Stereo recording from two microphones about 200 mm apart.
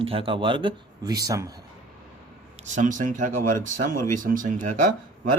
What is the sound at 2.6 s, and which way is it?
A man's voice, 40° right (ahead or behind).